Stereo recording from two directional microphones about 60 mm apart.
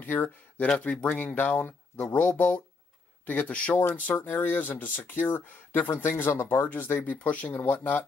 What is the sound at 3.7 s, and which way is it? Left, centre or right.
Speech, left.